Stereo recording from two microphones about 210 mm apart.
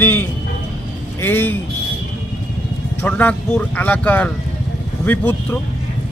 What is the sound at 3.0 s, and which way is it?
Speech, 5° left (ahead or behind).